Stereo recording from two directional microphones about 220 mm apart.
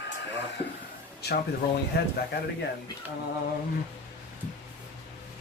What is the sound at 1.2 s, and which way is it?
Speech, 45° left (ahead or behind).